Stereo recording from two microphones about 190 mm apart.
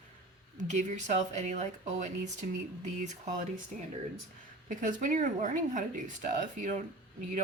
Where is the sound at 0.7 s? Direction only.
40° right (ahead or behind).